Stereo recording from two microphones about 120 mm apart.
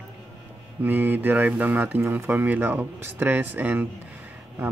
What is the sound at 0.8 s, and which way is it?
Speech, 15° right (ahead or behind).